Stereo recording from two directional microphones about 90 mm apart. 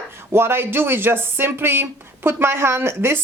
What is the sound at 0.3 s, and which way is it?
Speech, 25° right (ahead or behind).